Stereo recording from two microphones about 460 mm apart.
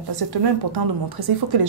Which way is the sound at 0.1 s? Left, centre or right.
Right.